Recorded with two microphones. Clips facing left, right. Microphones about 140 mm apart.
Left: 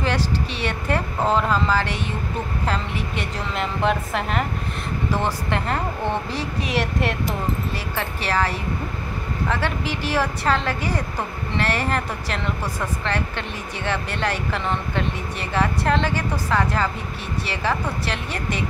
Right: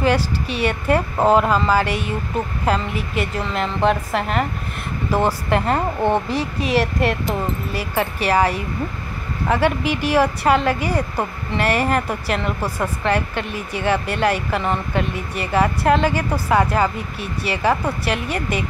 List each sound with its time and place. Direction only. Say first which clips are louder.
0.0 s a woman's voice: right 4 dB; 10° right (ahead or behind)
3.5 s a woman's voice: right 3 dB; centre (ahead or behind)
5.1 s speech: right 6 dB; 45° right (ahead or behind)
6.7 s a woman's voice: right 5 dB; centre (ahead or behind)
7.7 s a woman's voice: right 5 dB; 10° right (ahead or behind)